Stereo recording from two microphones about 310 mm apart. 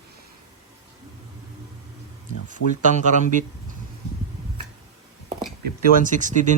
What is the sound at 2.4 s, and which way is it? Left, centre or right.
Speech, right.